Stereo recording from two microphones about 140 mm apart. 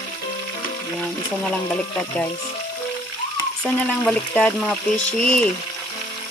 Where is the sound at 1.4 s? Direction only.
5° left (ahead or behind).